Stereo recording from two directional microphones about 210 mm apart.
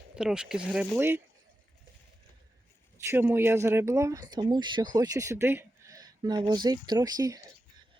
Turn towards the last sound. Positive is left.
turn(degrees=-20)  # may be behind; listen again after turning